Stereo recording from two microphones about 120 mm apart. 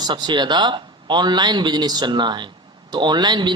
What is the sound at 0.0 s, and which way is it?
A man's voice, 35° right (ahead or behind).